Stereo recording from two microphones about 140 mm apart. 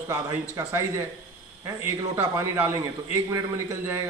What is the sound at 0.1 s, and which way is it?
Speech, 20° right (ahead or behind).